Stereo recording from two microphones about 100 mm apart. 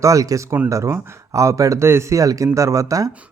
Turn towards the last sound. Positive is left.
turn(degrees=-35)  # may be behind; listen again after turning